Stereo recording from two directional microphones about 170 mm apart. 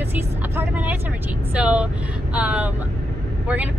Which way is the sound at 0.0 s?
10° right (ahead or behind).